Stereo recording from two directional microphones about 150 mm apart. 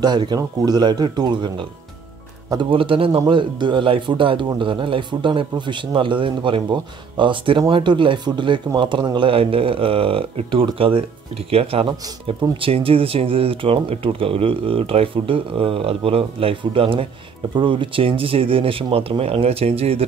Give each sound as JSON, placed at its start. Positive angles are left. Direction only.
{"t": 0.0, "sound": "speech", "side_deg": -30}